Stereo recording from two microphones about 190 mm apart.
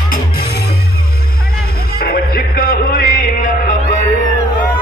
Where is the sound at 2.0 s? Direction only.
50° left (ahead or behind).